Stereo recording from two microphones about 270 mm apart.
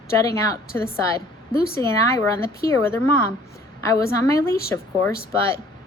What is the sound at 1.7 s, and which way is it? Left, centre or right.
A woman's voice, centre.